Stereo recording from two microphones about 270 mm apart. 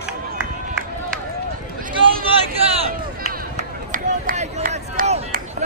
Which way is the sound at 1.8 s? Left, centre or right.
Right.